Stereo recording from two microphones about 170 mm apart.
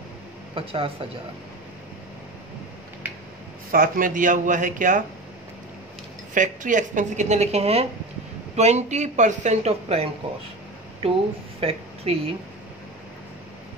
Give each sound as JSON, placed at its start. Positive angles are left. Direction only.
{"t": 0.6, "sound": "a man's voice", "side_deg": -30}
{"t": 3.7, "sound": "a woman's voice", "side_deg": -55}
{"t": 6.3, "sound": "a woman's voice", "side_deg": -50}